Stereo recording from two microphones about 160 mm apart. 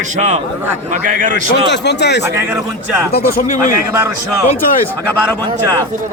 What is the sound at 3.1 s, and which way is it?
Speech, 60° left (ahead or behind).